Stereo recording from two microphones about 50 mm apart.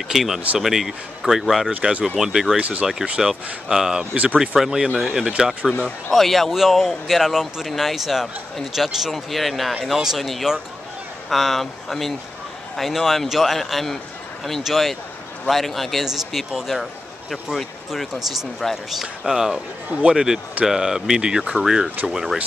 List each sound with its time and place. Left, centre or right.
0.1 s speech: centre
1.9 s speech: right
2.1 s speech: centre
2.5 s speech: right
3.2 s speech: centre
4.0 s speech: right
4.4 s speech: centre
6.0 s speech: centre